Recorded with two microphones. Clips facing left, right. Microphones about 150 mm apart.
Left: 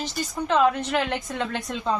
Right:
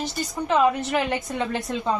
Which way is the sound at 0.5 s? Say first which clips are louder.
Right 1 dB; 10° right (ahead or behind).